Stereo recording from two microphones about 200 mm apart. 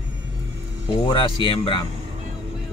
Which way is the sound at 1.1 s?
25° left (ahead or behind).